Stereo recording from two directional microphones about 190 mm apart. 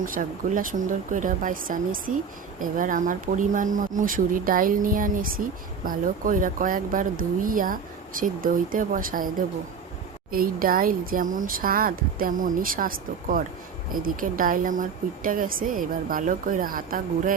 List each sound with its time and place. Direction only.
0.0 s speech: 45° right (ahead or behind)
10.3 s speech: 50° right (ahead or behind)